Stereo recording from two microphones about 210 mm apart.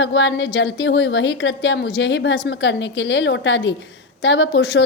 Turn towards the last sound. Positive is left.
turn(degrees=60)  # may be behind; listen again after turning